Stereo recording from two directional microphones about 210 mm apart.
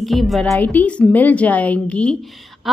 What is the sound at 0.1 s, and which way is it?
A woman's voice, centre (ahead or behind).